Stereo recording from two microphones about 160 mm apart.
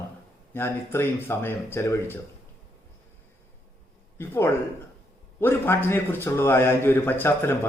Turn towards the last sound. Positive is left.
turn(degrees=10)  # may be behind; listen again after turning